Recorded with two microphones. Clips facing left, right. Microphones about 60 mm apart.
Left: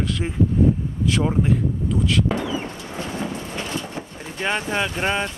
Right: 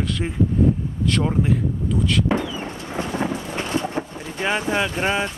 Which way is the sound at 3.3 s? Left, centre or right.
Right.